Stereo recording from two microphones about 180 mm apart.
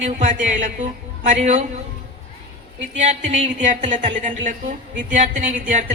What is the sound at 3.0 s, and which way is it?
Speech, 40° right (ahead or behind).